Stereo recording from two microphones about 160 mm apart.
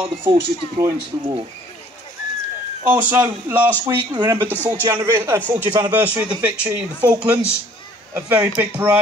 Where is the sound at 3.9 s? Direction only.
25° right (ahead or behind).